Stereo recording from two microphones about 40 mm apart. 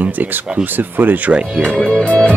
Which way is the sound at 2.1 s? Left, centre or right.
Left.